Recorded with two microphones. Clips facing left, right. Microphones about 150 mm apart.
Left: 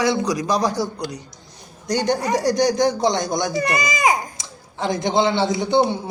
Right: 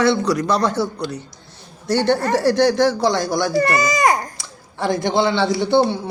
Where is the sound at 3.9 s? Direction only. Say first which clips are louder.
Right 2 dB; centre (ahead or behind).